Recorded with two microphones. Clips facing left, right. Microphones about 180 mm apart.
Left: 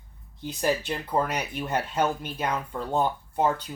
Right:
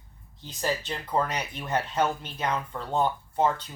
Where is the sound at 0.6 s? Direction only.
10° left (ahead or behind).